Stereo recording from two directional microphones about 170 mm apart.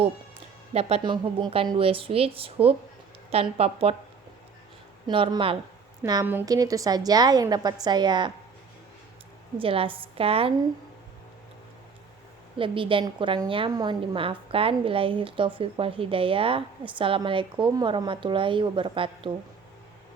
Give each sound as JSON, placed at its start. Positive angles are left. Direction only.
{"t": 0.7, "sound": "a woman's voice", "side_deg": -35}
{"t": 5.0, "sound": "a woman's voice", "side_deg": -30}
{"t": 9.6, "sound": "a woman's voice", "side_deg": -30}
{"t": 12.5, "sound": "a woman's voice", "side_deg": -30}